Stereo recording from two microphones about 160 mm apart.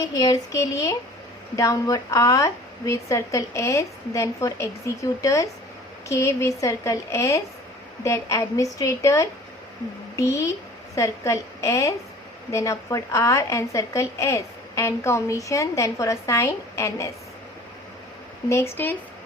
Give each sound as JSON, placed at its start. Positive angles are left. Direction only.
{"t": 0.1, "sound": "a woman's voice", "side_deg": 25}
{"t": 18.4, "sound": "speech", "side_deg": 15}